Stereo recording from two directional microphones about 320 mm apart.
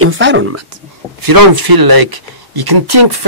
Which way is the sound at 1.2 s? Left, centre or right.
Right.